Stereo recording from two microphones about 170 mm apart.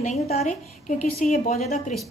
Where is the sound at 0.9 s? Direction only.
55° left (ahead or behind).